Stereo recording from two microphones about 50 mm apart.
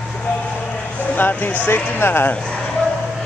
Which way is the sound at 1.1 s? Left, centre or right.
Left.